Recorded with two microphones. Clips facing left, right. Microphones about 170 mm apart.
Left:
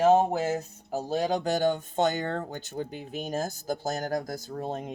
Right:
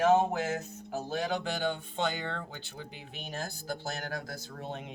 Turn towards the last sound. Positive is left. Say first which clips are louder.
# left 7 dB
turn(degrees=40)  # may be behind; listen again after turning